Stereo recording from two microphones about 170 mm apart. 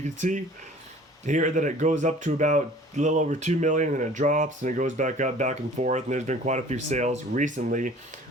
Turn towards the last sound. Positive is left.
turn(degrees=-50)  # may be behind; listen again after turning